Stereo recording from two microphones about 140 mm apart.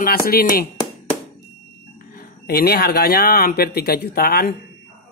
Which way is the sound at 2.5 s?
90° left.